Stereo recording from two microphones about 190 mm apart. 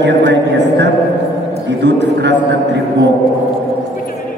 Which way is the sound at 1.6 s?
65° right (ahead or behind).